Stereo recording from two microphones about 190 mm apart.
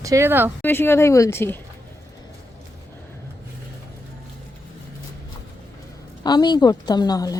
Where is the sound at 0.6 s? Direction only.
10° left (ahead or behind).